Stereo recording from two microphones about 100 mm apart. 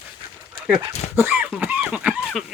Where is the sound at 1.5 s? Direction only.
15° right (ahead or behind).